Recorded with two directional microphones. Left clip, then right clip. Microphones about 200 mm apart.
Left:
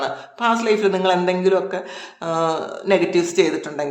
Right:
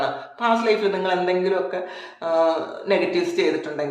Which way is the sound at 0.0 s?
35° left (ahead or behind).